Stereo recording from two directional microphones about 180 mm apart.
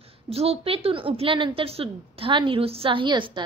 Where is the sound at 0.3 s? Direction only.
35° right (ahead or behind).